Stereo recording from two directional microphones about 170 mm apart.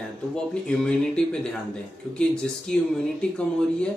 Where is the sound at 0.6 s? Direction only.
5° left (ahead or behind).